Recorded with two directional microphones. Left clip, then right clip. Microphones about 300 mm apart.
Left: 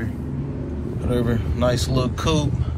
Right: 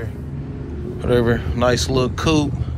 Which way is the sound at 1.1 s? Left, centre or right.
Right.